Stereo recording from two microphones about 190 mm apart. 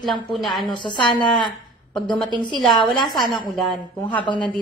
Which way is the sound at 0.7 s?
25° left (ahead or behind).